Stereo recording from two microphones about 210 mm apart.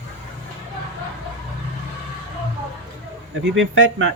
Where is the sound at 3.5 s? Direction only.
65° right (ahead or behind).